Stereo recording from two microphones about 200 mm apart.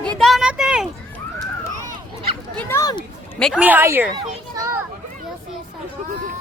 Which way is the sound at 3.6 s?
10° right (ahead or behind).